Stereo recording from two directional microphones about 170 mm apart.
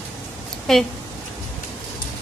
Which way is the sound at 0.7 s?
Centre (ahead or behind).